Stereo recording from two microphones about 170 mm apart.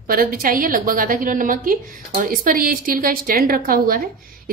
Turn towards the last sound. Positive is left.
turn(degrees=-60)  # may be behind; listen again after turning